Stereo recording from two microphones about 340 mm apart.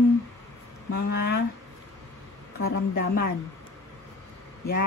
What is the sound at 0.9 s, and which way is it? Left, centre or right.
Speech, left.